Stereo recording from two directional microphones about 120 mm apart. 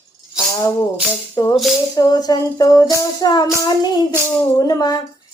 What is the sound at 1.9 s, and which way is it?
Music, 30° left (ahead or behind).